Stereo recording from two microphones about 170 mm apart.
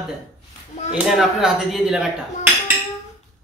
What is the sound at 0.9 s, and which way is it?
Speech, centre (ahead or behind).